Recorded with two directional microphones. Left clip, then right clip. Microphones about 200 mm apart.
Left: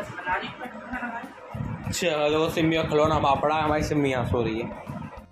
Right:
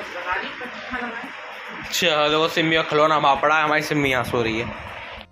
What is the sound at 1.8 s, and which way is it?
A man's voice, centre (ahead or behind).